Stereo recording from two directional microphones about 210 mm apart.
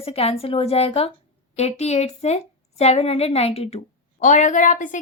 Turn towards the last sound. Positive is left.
turn(degrees=35)  # may be behind; listen again after turning